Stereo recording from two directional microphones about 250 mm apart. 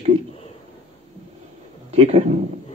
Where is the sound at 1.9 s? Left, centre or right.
Right.